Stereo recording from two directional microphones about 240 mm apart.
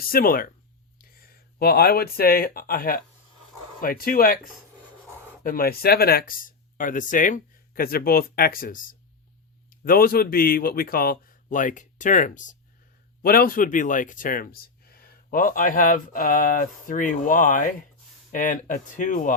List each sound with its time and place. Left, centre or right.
0.0 s speech: left
5.4 s a man's voice: left